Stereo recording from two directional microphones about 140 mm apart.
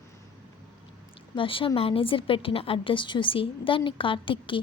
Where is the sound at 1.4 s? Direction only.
40° left (ahead or behind).